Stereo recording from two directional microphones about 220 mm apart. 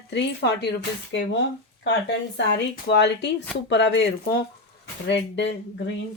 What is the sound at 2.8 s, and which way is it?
Speech, 50° left (ahead or behind).